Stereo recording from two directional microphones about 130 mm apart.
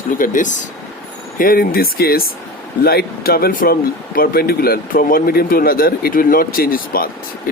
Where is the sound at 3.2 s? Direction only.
90° left.